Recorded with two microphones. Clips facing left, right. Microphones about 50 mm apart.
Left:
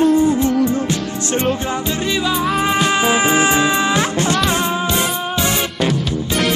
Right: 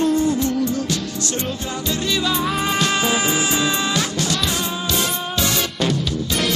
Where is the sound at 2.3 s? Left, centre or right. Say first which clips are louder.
Left 4 dB; centre.